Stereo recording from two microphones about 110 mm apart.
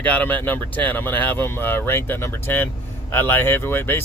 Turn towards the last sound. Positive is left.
turn(degrees=20)  # may be behind; listen again after turning